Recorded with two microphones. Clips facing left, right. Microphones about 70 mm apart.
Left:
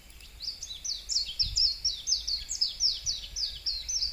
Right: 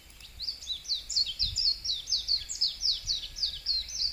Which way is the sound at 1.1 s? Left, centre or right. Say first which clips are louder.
Even; centre.